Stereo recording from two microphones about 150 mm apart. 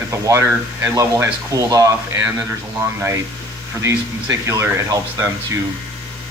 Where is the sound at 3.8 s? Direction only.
20° right (ahead or behind).